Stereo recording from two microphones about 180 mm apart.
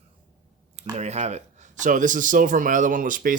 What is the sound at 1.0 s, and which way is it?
Speech, 40° right (ahead or behind).